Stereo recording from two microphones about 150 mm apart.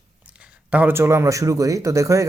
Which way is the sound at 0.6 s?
10° right (ahead or behind).